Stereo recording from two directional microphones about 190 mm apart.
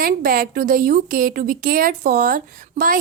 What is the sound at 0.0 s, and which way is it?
A woman's voice, 50° right (ahead or behind).